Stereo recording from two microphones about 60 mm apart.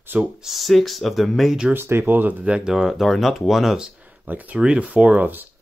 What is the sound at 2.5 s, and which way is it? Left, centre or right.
Speech, centre.